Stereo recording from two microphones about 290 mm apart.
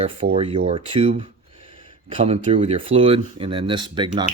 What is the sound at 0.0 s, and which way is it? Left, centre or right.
Speech, centre.